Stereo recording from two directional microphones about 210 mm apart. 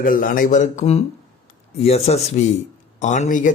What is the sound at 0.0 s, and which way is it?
Speech, 40° left (ahead or behind).